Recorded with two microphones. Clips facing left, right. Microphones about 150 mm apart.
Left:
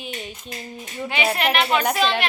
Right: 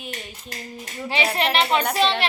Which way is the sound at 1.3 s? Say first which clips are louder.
Right 1 dB; 30° right (ahead or behind).